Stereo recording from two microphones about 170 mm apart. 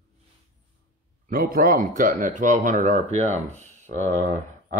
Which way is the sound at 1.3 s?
60° right (ahead or behind).